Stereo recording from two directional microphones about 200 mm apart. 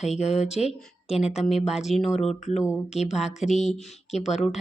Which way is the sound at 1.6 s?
Centre (ahead or behind).